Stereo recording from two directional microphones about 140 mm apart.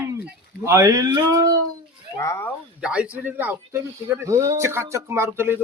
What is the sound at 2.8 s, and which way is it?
A man's voice, 10° right (ahead or behind).